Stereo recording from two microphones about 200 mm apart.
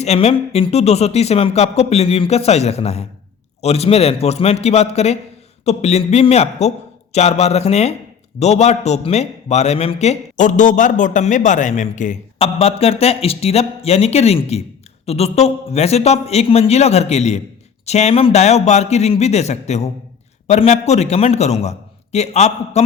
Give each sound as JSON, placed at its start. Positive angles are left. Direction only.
{"t": 0.0, "sound": "a man's voice", "side_deg": 30}